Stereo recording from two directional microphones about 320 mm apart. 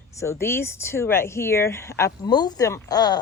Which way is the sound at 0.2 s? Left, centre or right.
Centre.